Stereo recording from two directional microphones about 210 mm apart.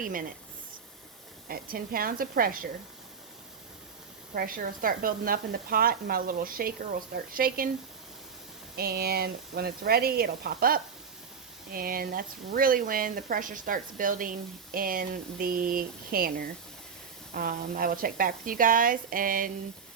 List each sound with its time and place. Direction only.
0.0 s speech: 40° right (ahead or behind)
1.5 s speech: 45° right (ahead or behind)
4.4 s speech: 40° right (ahead or behind)
8.7 s speech: 45° right (ahead or behind)